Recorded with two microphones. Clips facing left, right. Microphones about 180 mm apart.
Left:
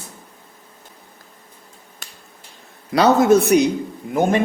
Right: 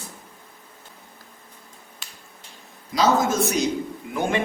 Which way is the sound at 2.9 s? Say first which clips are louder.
Left 7 dB; 65° left (ahead or behind).